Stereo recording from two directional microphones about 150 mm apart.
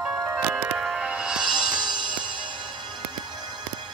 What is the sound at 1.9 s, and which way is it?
Music, 30° right (ahead or behind).